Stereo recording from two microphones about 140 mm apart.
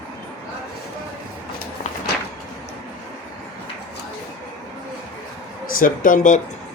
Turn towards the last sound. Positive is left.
turn(degrees=70)  # may be behind; listen again after turning